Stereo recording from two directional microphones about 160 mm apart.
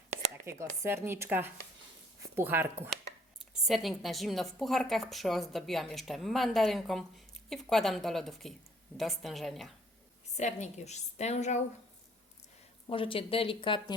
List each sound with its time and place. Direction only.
0.8 s a woman's voice: 15° right (ahead or behind)
3.7 s a woman's voice: centre (ahead or behind)
10.3 s a woman's voice: 45° left (ahead or behind)
12.9 s speech: 35° left (ahead or behind)